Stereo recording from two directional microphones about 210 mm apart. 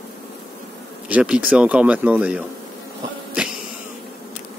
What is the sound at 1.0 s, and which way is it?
A man's voice, 5° right (ahead or behind).